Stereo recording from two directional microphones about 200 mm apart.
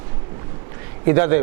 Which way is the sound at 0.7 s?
15° right (ahead or behind).